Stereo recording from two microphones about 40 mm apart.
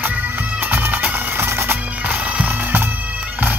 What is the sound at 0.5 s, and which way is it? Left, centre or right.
Bagpipes, right.